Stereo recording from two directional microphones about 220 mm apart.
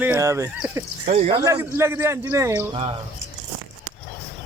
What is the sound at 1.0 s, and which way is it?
Speech, 30° right (ahead or behind).